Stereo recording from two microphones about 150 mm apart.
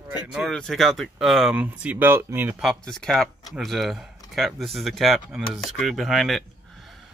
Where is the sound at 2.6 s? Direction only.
5° left (ahead or behind).